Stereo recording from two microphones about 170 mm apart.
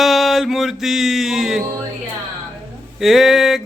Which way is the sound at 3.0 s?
Centre (ahead or behind).